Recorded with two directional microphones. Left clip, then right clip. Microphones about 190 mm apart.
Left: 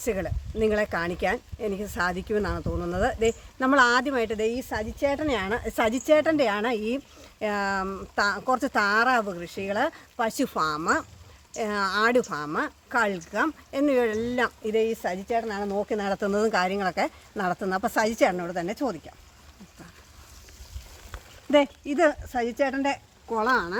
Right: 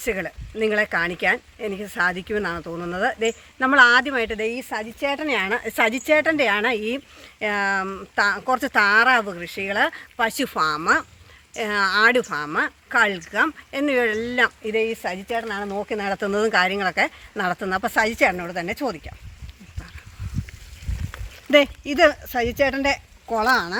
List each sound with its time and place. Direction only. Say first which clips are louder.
0.0 s speech: right 3 dB; centre (ahead or behind)
21.5 s speech: right 5 dB; 35° right (ahead or behind)
23.3 s speech: right 4 dB; 55° right (ahead or behind)